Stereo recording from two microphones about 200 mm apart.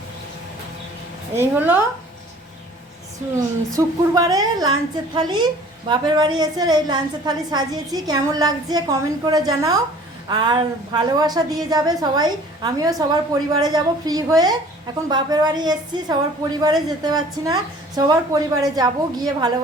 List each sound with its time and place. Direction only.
1.4 s a woman's voice: 10° right (ahead or behind)
3.7 s a woman's voice: 15° right (ahead or behind)